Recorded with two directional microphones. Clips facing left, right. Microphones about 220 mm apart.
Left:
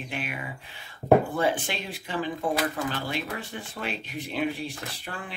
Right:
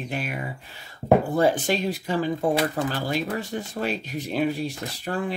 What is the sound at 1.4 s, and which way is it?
Speech, 40° right (ahead or behind).